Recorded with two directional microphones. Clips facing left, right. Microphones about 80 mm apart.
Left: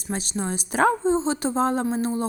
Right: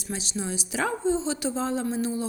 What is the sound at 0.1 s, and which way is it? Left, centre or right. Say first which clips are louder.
A woman's voice: left 4 dB; left.